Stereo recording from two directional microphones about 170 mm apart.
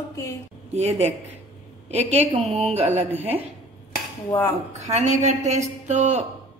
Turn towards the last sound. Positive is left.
turn(degrees=-45)  # may be behind; listen again after turning